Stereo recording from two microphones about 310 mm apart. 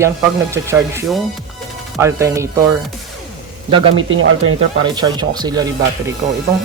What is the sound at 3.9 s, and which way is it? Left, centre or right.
Speech, right.